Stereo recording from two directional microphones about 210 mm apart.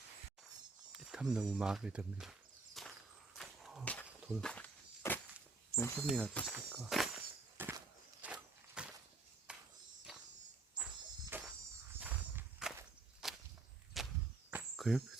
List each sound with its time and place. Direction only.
0.9 s speech: 5° right (ahead or behind)
2.8 s walk: centre (ahead or behind)
5.7 s speech: 5° left (ahead or behind)
6.5 s speech: 5° right (ahead or behind)
7.5 s a sound: 10° right (ahead or behind)
10.8 s music: 5° right (ahead or behind)
11.9 s walk: 5° right (ahead or behind)
13.2 s whip: centre (ahead or behind)
14.0 s a sound: centre (ahead or behind)
14.5 s cricket: centre (ahead or behind)